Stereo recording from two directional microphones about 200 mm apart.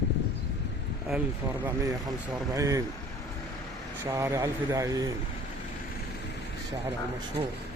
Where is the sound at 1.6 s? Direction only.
15° right (ahead or behind).